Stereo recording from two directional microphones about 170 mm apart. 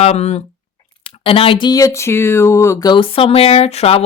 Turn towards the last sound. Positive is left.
turn(degrees=35)  # may be behind; listen again after turning